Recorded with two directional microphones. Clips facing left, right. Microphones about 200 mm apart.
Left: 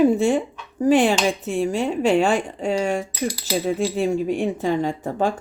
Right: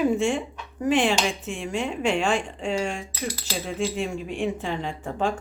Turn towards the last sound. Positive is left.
turn(degrees=40)  # may be behind; listen again after turning